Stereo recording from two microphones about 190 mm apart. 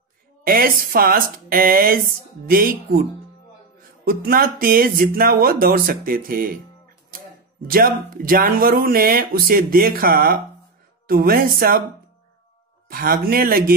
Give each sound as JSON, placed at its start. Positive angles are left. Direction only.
{"t": 0.4, "sound": "speech", "side_deg": -50}
{"t": 7.7, "sound": "speech", "side_deg": -50}
{"t": 12.9, "sound": "speech", "side_deg": -50}